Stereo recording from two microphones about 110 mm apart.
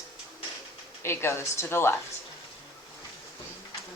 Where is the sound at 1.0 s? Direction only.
20° left (ahead or behind).